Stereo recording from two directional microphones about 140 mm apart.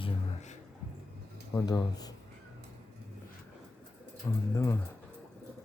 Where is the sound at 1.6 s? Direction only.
30° left (ahead or behind).